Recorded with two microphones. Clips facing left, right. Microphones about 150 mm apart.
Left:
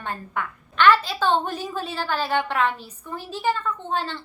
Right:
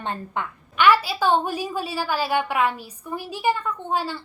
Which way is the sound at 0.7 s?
10° right (ahead or behind).